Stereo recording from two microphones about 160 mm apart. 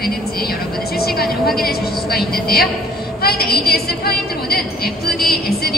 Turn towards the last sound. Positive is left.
turn(degrees=70)  # may be behind; listen again after turning